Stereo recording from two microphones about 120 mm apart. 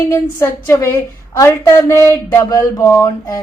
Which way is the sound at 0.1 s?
25° left (ahead or behind).